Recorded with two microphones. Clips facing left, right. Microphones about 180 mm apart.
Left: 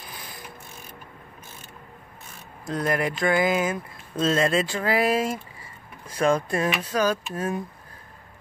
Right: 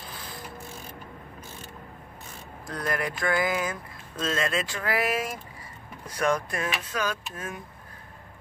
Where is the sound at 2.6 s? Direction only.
25° left (ahead or behind).